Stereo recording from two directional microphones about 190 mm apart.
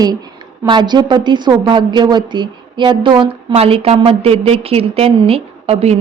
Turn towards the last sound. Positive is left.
turn(degrees=-35)  # may be behind; listen again after turning